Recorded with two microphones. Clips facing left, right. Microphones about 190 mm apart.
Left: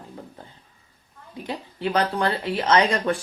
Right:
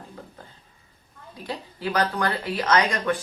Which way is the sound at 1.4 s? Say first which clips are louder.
Left 2 dB; 25° left (ahead or behind).